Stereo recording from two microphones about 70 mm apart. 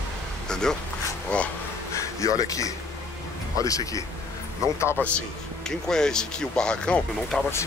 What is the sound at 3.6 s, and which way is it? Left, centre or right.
Speech, left.